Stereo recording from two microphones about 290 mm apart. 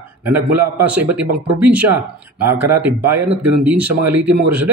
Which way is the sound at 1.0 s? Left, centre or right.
Right.